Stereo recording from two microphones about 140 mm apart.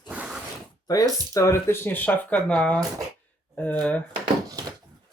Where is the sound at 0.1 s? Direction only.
10° right (ahead or behind).